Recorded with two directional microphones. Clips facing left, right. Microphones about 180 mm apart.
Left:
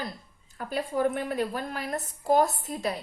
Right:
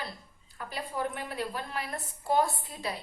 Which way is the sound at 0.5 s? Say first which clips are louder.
Left 7 dB; 45° left (ahead or behind).